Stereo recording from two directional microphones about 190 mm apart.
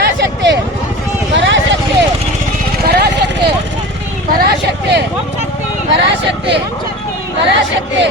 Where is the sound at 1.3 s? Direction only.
70° right (ahead or behind).